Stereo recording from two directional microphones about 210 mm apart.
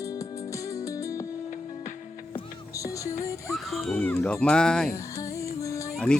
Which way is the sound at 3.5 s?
Centre (ahead or behind).